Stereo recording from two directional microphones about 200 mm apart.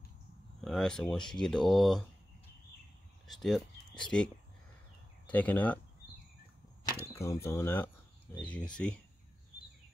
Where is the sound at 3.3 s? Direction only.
Centre (ahead or behind).